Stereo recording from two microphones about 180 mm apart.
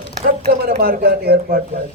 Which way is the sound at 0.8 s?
60° right (ahead or behind).